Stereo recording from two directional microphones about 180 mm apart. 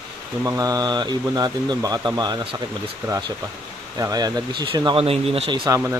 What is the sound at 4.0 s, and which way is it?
Speech, 20° right (ahead or behind).